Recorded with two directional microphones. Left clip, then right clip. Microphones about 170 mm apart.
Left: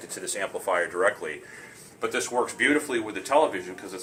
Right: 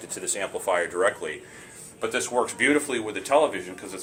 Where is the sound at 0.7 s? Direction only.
30° right (ahead or behind).